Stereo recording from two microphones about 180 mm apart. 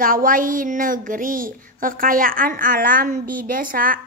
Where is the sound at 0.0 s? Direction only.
50° right (ahead or behind).